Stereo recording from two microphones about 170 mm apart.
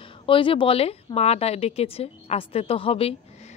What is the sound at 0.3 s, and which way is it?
A woman's voice, 30° left (ahead or behind).